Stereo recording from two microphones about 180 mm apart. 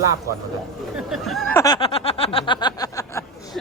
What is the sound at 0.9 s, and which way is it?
Speech, centre (ahead or behind).